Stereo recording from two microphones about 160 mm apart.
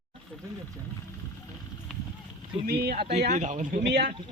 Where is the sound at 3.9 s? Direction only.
90° right.